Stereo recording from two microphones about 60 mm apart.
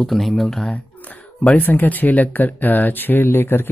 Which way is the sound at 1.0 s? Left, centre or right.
Left.